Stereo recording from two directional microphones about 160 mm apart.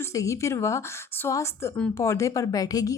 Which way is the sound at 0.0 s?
20° left (ahead or behind).